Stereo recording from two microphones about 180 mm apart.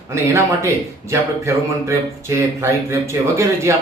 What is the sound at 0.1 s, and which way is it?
Speech, 15° right (ahead or behind).